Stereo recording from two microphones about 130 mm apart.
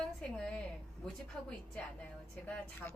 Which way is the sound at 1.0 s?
10° left (ahead or behind).